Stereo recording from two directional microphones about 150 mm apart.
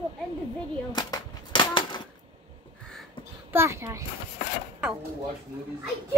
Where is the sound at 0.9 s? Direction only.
25° left (ahead or behind).